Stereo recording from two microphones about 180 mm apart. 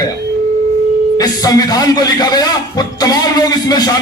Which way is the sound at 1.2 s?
20° left (ahead or behind).